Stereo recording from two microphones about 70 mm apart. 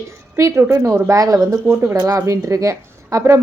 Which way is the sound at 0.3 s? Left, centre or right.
Right.